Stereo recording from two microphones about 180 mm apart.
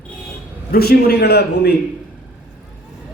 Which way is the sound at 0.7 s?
60° left (ahead or behind).